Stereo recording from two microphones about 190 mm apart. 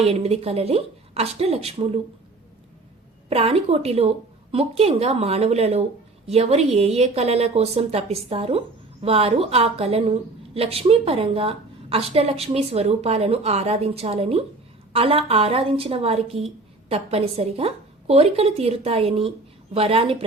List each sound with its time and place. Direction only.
0.0 s a woman's voice: 30° right (ahead or behind)
3.2 s a woman's voice: 30° right (ahead or behind)